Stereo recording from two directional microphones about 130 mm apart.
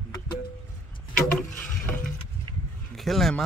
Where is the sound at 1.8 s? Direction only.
15° left (ahead or behind).